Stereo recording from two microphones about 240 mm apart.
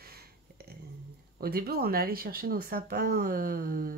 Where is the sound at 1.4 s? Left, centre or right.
Right.